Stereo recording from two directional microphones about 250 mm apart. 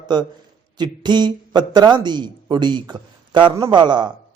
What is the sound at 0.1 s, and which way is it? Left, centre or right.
Speech, centre.